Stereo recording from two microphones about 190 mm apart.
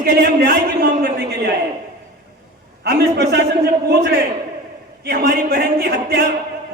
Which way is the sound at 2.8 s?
60° right (ahead or behind).